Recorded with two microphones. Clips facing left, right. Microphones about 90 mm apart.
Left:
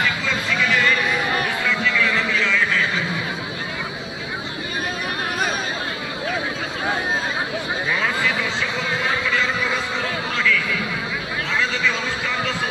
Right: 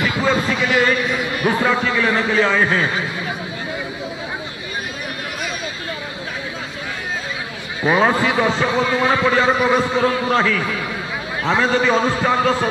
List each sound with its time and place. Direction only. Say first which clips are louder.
0.0 s a sound: right 5 dB; 40° right (ahead or behind)
1.4 s a man's voice: right 5 dB; 40° right (ahead or behind)
7.8 s a man's voice: right 9 dB; 40° right (ahead or behind)